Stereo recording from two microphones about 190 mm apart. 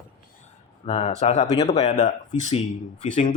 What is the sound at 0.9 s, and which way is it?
Speech, 35° left (ahead or behind).